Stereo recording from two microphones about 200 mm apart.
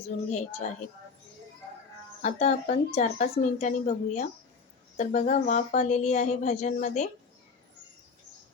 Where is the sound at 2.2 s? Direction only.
35° left (ahead or behind).